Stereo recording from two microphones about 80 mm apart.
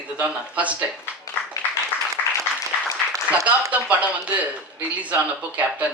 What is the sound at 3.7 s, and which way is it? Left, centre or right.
Speech, centre.